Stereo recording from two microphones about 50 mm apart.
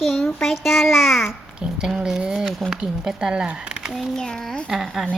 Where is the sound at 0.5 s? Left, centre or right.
Centre.